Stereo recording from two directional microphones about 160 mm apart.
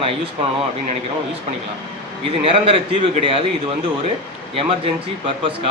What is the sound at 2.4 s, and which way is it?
Speech, 35° right (ahead or behind).